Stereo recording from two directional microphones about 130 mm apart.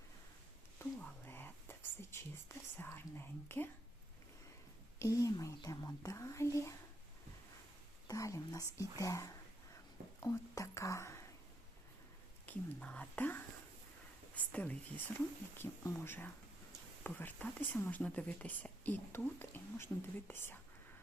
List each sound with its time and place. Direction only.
1.3 s whispering: 15° left (ahead or behind)
4.9 s whispering: 25° left (ahead or behind)
8.0 s speech: 25° left (ahead or behind)
12.5 s speech: 10° left (ahead or behind)